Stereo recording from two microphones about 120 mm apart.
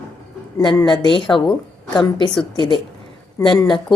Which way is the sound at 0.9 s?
40° left (ahead or behind).